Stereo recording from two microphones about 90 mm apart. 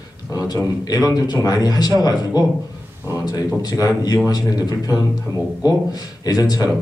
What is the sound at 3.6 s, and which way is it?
A man's voice, 45° left (ahead or behind).